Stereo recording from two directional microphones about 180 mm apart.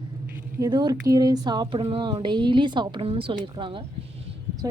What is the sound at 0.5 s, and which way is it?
A woman's voice, 20° right (ahead or behind).